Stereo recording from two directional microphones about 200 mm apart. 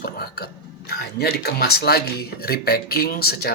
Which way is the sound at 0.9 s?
50° left (ahead or behind).